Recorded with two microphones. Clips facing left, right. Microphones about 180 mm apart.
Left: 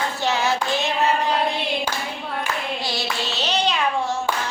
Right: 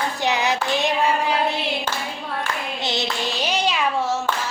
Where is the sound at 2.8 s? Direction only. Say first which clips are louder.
Right 2 dB; 20° right (ahead or behind).